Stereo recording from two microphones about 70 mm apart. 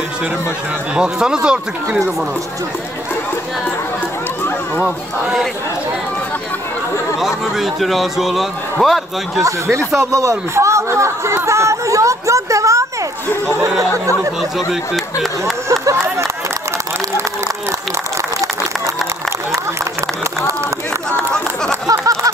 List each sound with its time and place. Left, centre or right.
0.9 s speech: centre
5.2 s a man's voice: centre
7.2 s a man's voice: centre
9.4 s speech: right
15.7 s a sound: right
21.8 s a sound: right